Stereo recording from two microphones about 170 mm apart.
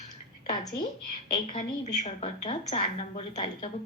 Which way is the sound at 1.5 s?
40° left (ahead or behind).